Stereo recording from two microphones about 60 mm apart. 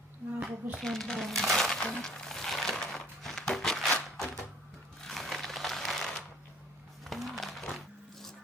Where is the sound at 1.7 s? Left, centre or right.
Centre.